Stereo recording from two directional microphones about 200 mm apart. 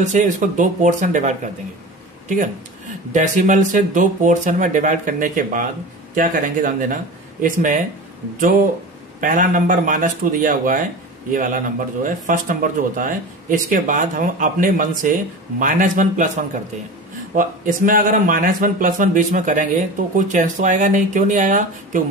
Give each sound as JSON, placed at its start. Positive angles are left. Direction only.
{"t": 0.0, "sound": "a man's voice", "side_deg": -40}
{"t": 9.2, "sound": "a man's voice", "side_deg": -40}